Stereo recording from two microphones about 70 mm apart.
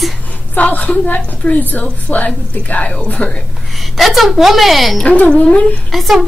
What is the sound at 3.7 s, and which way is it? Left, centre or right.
A woman's voice, centre.